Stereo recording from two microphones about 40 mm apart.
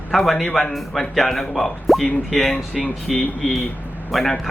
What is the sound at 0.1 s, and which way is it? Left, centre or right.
Speech, centre.